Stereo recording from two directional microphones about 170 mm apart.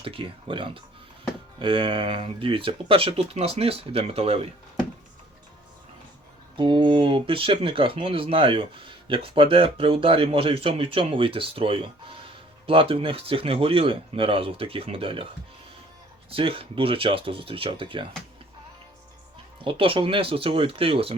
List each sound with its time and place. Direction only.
0.0 s speech: 30° right (ahead or behind)
6.6 s speech: 30° right (ahead or behind)
16.3 s speech: 30° right (ahead or behind)
19.6 s speech: 30° right (ahead or behind)